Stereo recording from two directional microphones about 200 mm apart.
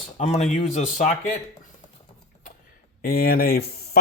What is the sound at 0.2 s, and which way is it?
Speech, 35° left (ahead or behind).